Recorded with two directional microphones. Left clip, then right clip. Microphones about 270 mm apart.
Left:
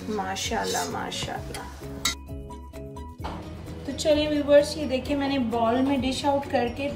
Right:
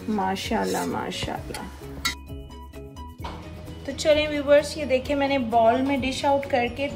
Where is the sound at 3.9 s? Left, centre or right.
Centre.